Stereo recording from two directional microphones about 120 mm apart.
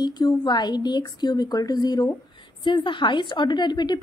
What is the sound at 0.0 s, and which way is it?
A woman's voice, 35° left (ahead or behind).